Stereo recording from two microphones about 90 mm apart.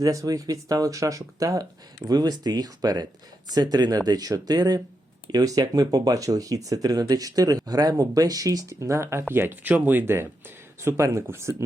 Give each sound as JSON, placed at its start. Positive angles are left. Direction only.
{"t": 0.0, "sound": "speech", "side_deg": -40}